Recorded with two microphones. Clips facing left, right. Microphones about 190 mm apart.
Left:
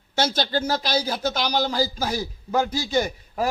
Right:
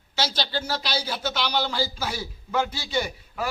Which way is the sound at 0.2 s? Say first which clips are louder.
Left 5 dB; 50° left (ahead or behind).